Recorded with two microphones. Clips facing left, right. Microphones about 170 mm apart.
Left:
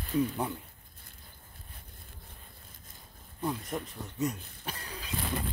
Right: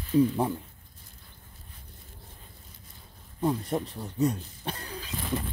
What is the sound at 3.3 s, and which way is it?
Speech, 30° right (ahead or behind).